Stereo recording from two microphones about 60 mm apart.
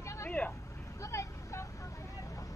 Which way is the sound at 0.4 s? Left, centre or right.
Left.